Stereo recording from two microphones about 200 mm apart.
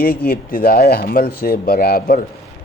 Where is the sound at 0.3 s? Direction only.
50° left (ahead or behind).